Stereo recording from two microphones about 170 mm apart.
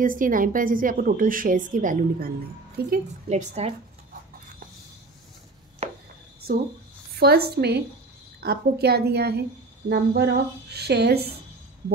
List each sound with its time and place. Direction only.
0.0 s a woman's voice: 55° right (ahead or behind)
3.3 s a woman's voice: 40° right (ahead or behind)
5.8 s chopping: 40° right (ahead or behind)
6.4 s a woman's voice: 65° right (ahead or behind)